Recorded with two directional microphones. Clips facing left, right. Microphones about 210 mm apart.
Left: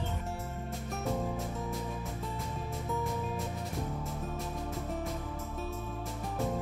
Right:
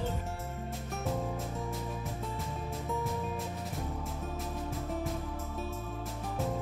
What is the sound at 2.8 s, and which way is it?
Music, centre (ahead or behind).